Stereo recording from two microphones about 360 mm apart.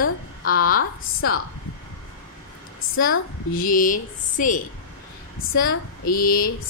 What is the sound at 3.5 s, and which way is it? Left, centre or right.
Speech, left.